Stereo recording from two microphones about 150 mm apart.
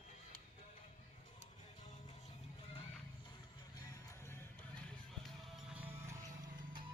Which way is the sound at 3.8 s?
20° left (ahead or behind).